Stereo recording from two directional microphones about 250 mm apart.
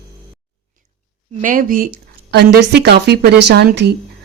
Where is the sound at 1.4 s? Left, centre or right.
Right.